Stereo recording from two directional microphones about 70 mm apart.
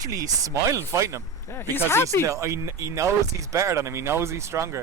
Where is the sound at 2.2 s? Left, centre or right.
Right.